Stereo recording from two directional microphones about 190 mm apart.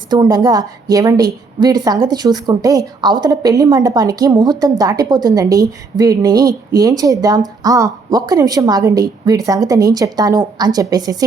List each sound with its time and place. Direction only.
0.1 s a woman's voice: 20° right (ahead or behind)